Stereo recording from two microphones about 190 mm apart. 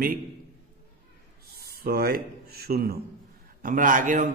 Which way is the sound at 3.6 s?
45° right (ahead or behind).